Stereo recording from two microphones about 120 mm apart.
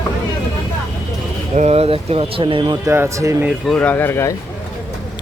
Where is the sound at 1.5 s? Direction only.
60° right (ahead or behind); by 2.7 s 45° right (ahead or behind).